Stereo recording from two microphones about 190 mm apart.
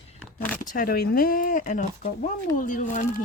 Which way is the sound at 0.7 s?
50° left (ahead or behind).